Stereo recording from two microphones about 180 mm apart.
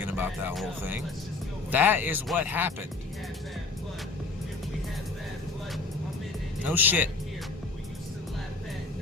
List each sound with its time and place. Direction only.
0.0 s speech: 10° right (ahead or behind)
1.7 s speech: 10° right (ahead or behind)
6.7 s speech: 10° right (ahead or behind)